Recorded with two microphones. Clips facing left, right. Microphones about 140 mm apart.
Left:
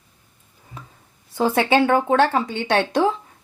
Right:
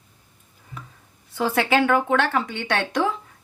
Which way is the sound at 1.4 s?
25° left (ahead or behind).